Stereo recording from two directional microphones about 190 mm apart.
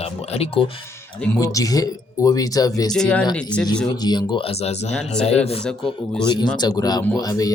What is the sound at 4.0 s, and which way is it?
Speech, 20° left (ahead or behind).